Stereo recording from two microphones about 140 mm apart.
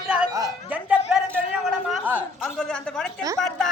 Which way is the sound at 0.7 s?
10° right (ahead or behind).